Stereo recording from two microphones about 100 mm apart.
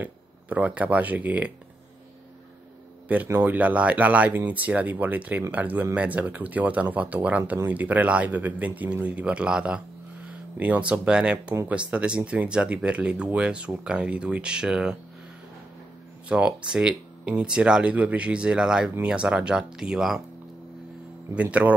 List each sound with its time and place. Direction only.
0.0 s speech: 15° right (ahead or behind)
3.1 s speech: 20° right (ahead or behind)
16.3 s speech: 10° right (ahead or behind)
21.4 s speech: 15° right (ahead or behind)